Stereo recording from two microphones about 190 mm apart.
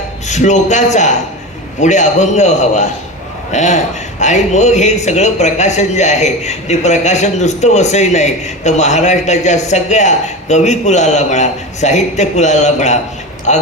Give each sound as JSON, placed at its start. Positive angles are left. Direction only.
{"t": 0.3, "sound": "a man's voice", "side_deg": 40}